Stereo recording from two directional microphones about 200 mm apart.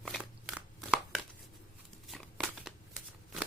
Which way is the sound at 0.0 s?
Centre (ahead or behind).